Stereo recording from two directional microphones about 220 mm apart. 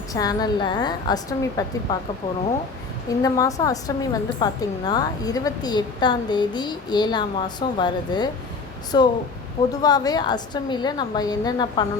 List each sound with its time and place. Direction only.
0.1 s a woman's voice: 15° left (ahead or behind)
3.1 s a woman's voice: 15° left (ahead or behind)